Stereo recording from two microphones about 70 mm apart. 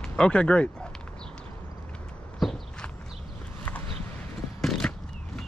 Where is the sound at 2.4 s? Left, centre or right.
Centre.